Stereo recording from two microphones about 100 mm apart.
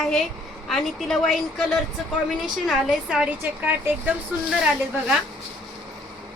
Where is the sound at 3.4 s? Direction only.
20° right (ahead or behind).